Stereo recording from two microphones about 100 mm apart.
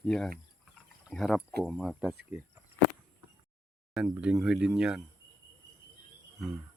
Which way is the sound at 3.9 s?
5° right (ahead or behind).